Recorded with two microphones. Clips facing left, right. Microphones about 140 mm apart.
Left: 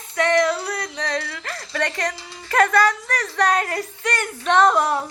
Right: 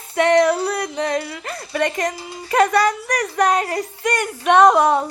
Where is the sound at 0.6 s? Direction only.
30° right (ahead or behind).